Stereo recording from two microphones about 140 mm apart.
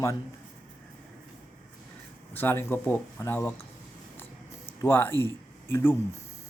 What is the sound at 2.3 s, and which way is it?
Speech, 15° left (ahead or behind).